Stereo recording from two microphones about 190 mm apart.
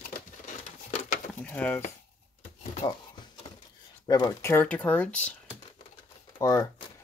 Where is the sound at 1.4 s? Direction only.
10° left (ahead or behind).